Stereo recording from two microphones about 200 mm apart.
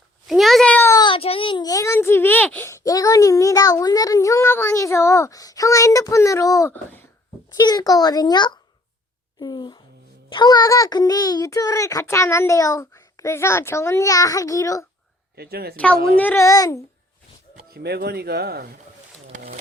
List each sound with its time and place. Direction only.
0.3 s a child's voice: centre (ahead or behind); by 14.8 s 15° left (ahead or behind)
15.4 s speech: 50° right (ahead or behind)
15.7 s a woman's voice: 5° left (ahead or behind)
17.7 s speech: 55° right (ahead or behind)